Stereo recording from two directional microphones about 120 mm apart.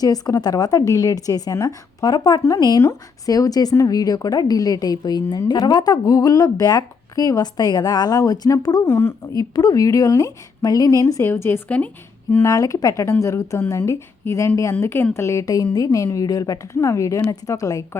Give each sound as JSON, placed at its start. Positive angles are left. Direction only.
{"t": 0.0, "sound": "a woman's voice", "side_deg": 30}